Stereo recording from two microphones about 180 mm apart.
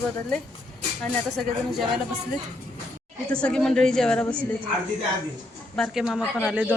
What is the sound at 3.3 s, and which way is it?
Speech, 5° left (ahead or behind).